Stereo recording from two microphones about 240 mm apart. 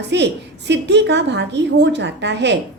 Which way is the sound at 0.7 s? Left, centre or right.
Right.